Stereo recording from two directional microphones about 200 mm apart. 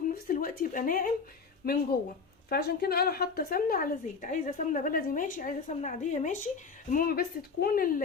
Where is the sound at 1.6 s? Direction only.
45° left (ahead or behind).